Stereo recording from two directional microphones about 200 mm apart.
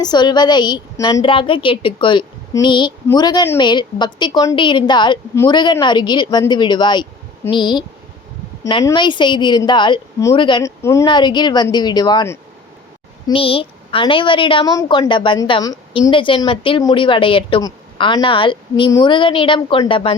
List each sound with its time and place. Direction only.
0.0 s a woman's voice: 20° left (ahead or behind)
13.2 s a woman's voice: 25° left (ahead or behind)